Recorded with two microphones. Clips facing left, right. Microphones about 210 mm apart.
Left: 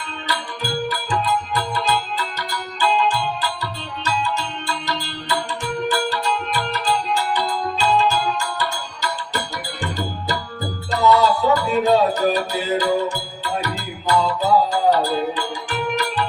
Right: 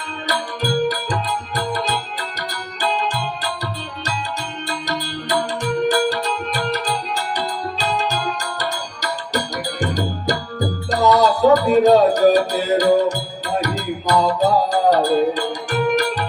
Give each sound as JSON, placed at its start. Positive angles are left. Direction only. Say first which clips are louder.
{"t": 0.9, "sound": "music", "louder": "even", "side_deg": -45}